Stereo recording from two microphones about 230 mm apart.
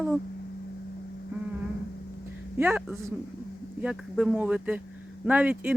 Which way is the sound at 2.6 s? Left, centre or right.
Centre.